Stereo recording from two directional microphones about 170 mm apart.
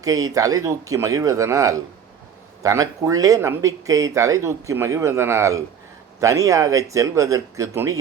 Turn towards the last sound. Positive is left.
turn(degrees=-15)  # may be behind; listen again after turning